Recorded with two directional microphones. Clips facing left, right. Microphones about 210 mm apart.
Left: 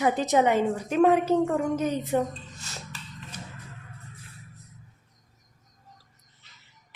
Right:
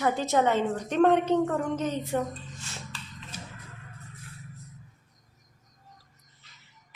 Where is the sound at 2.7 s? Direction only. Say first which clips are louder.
Left 2 dB; 40° left (ahead or behind).